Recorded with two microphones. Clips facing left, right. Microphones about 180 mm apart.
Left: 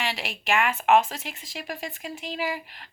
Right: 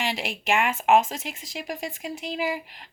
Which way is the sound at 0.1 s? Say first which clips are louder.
Right 1 dB; 25° right (ahead or behind).